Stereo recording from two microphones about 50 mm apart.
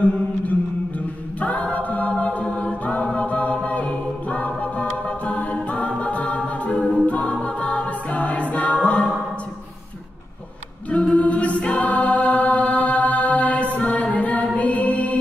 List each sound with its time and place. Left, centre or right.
0.0 s a capella: left
7.1 s choir: left
8.7 s music: left
10.9 s a capella: left
14.6 s music: left